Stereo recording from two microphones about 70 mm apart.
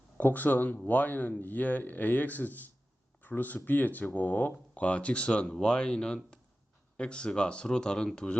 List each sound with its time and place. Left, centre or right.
0.2 s speech: left